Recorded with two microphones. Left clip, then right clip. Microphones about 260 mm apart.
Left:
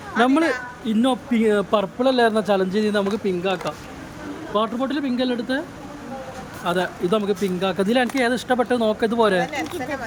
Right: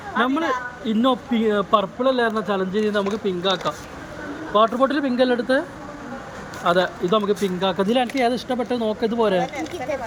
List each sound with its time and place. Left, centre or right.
0.2 s a woman's voice: centre
6.7 s a man's voice: centre